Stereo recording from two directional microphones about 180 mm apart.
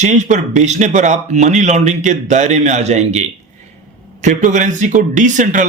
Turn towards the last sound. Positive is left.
turn(degrees=-45)  # may be behind; listen again after turning